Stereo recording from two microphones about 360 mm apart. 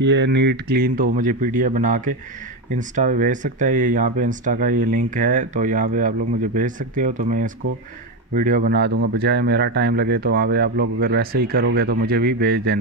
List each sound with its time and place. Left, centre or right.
0.0 s speech: right